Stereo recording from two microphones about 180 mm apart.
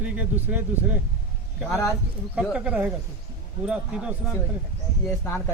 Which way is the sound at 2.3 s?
5° right (ahead or behind).